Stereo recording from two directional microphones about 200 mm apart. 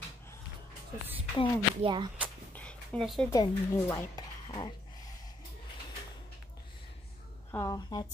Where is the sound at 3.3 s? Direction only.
15° left (ahead or behind).